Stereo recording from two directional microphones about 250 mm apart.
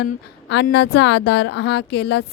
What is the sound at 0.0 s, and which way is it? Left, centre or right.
A woman's voice, left.